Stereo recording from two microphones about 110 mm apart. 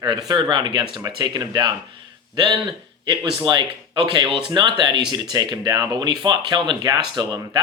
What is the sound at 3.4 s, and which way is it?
Speech, 40° right (ahead or behind).